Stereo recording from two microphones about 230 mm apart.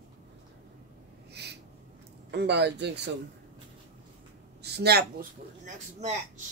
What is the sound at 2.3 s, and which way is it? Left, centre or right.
Speech, right.